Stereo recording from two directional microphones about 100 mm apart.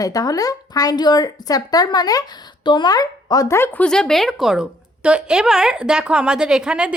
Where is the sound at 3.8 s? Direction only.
5° left (ahead or behind).